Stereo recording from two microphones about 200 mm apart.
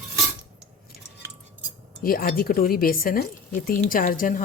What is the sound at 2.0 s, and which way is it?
Speech, 45° left (ahead or behind).